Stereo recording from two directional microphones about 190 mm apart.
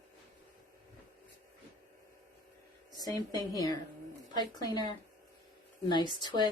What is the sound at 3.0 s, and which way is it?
A woman's voice, 20° left (ahead or behind).